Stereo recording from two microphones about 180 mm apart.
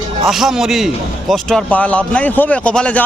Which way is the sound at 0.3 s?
Centre (ahead or behind).